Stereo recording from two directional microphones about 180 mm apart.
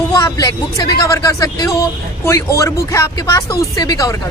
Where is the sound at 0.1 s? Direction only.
20° left (ahead or behind).